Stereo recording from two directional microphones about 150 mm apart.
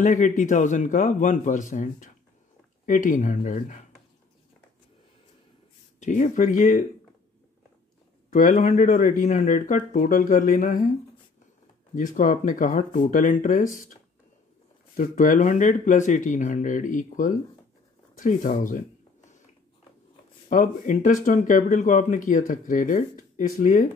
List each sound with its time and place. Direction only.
0.0 s speech: 60° left (ahead or behind)
5.9 s speech: 55° left (ahead or behind)
8.3 s speech: 55° left (ahead or behind)
11.9 s speech: 60° left (ahead or behind)
15.0 s speech: 60° left (ahead or behind)
20.4 s speech: 60° left (ahead or behind)